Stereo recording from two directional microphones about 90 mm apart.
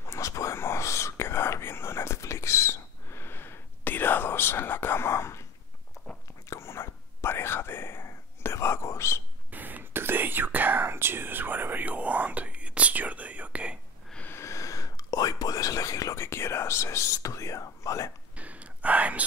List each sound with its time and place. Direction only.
0.0 s whispering: 35° left (ahead or behind)
6.5 s whispering: 30° left (ahead or behind)
9.5 s whispering: 20° right (ahead or behind)
14.3 s whispering: 35° left (ahead or behind)
18.3 s whispering: 15° right (ahead or behind)